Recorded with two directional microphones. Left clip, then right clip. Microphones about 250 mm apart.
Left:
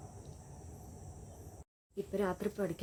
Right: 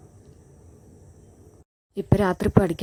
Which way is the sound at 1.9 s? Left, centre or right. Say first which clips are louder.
Right 13 dB; right.